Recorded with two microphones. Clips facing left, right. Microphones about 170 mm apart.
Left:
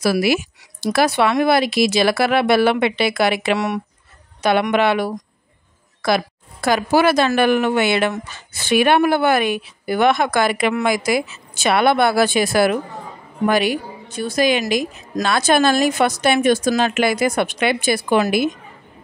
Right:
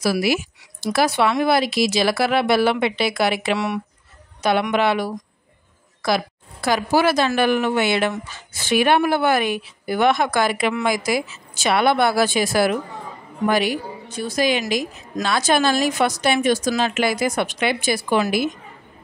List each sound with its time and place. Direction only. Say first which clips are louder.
0.0 s speech: left 3 dB; 60° left (ahead or behind)
3.5 s speech: left 2 dB; 45° left (ahead or behind)
4.4 s speech: left 2 dB; 60° left (ahead or behind)